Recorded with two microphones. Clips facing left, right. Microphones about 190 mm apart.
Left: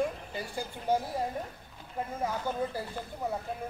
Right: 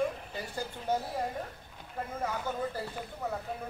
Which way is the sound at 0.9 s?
10° left (ahead or behind).